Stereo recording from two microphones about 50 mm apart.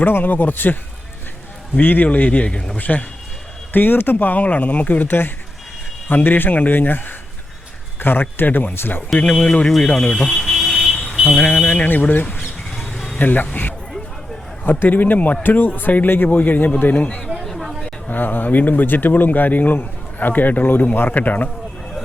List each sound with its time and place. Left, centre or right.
0.0 s speech: left
2.0 s mantra: left
2.7 s speech: left
8.7 s speech: left
9.1 s mantra: left
9.9 s speech: centre
10.2 s car alarm: centre
11.3 s mantra: left
12.8 s a sound: centre
13.1 s speech: left
16.9 s mantra: left
17.4 s a sound: centre
18.1 s speech: left